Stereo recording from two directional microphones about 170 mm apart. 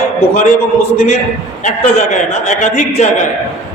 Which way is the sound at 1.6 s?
45° left (ahead or behind).